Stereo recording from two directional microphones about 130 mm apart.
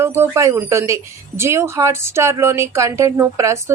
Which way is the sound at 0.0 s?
20° right (ahead or behind).